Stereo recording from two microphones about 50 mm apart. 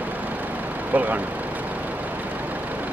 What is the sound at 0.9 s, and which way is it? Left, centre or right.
Speech, right.